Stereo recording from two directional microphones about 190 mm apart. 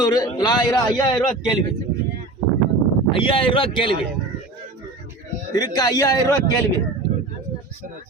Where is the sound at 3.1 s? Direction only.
25° left (ahead or behind).